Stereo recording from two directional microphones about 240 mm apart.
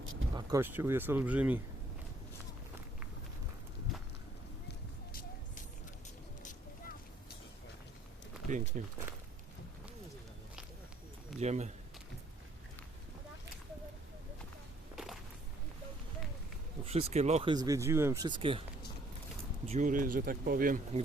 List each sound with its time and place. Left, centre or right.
0.0 s a sound: right
0.3 s speech: centre
6.4 s a sound: left
8.4 s speech: right
11.3 s speech: right
14.9 s walk: centre
16.8 s speech: right
19.6 s speech: right